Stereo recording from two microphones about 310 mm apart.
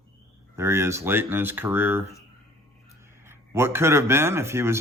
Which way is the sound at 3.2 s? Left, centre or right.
Centre.